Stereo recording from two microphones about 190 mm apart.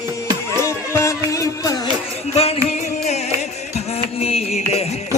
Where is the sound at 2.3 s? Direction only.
30° left (ahead or behind).